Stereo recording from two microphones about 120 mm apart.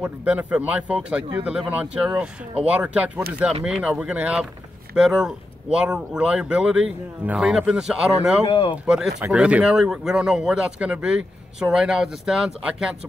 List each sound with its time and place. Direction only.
0.0 s speech: 15° right (ahead or behind)
8.5 s speech: 50° left (ahead or behind)
8.7 s speech: 5° right (ahead or behind)